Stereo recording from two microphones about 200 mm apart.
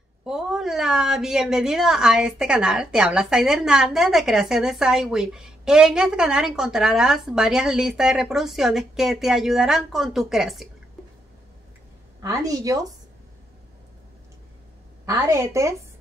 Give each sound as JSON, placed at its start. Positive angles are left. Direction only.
{"t": 0.2, "sound": "a woman's voice", "side_deg": 0}
{"t": 12.2, "sound": "speech", "side_deg": -15}
{"t": 15.0, "sound": "speech", "side_deg": -15}